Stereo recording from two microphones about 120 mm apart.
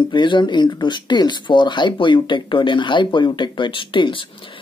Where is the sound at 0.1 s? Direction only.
40° left (ahead or behind).